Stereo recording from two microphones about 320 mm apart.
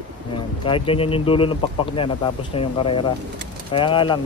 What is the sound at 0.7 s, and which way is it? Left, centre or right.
Speech, centre.